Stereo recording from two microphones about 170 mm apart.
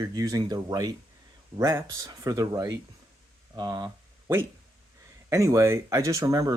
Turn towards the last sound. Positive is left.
turn(degrees=-20)  # may be behind; listen again after turning